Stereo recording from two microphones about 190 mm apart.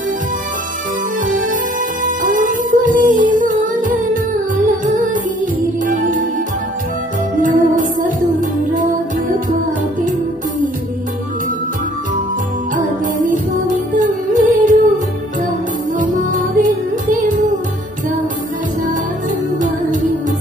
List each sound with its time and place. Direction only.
2.0 s music: 45° right (ahead or behind)
7.3 s music: 45° right (ahead or behind)
12.7 s music: 45° right (ahead or behind)
16.0 s music: 45° right (ahead or behind)
19.6 s music: 40° right (ahead or behind)